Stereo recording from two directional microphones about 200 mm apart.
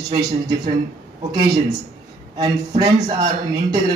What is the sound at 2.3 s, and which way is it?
A man's voice, 20° right (ahead or behind).